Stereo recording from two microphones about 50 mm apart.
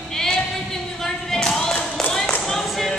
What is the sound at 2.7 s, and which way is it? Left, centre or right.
Music, centre.